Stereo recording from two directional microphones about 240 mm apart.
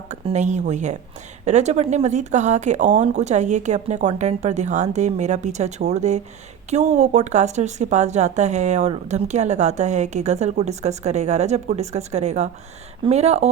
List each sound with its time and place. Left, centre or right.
0.1 s speech: right